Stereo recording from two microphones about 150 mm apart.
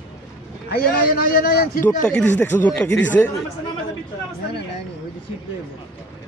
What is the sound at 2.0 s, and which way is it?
Speech, 10° left (ahead or behind).